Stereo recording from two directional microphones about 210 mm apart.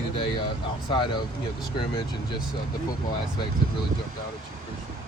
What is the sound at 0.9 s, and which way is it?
Speech, 20° left (ahead or behind).